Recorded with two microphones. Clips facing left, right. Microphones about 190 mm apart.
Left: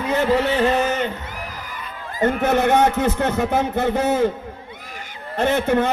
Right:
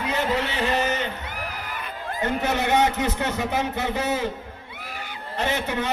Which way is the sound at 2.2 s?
50° left (ahead or behind).